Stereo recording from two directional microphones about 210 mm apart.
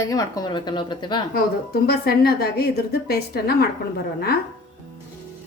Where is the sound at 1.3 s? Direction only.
45° left (ahead or behind).